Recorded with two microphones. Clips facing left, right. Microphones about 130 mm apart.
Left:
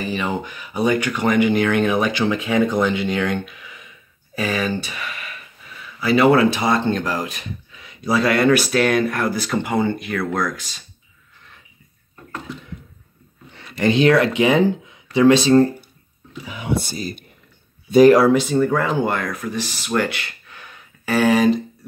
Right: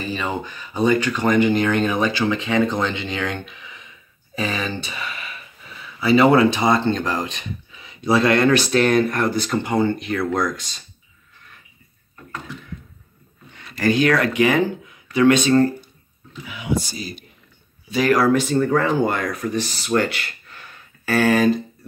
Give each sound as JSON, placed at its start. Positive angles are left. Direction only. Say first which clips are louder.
{"t": 0.1, "sound": "speech", "louder": "left 2 dB", "side_deg": 15}
{"t": 13.6, "sound": "speech", "louder": "left 2 dB", "side_deg": 25}
{"t": 16.6, "sound": "speech", "louder": "left 1 dB", "side_deg": 50}
{"t": 18.2, "sound": "speech", "louder": "left 2 dB", "side_deg": 15}